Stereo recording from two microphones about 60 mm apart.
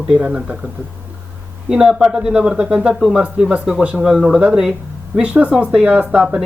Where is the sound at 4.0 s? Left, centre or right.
Centre.